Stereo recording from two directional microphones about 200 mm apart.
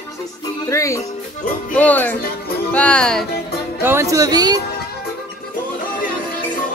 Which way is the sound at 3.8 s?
10° right (ahead or behind).